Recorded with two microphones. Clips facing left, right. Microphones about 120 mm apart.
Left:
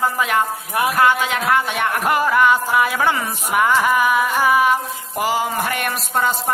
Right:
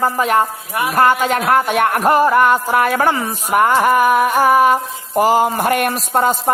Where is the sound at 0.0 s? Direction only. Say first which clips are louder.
Right 4 dB; 40° right (ahead or behind).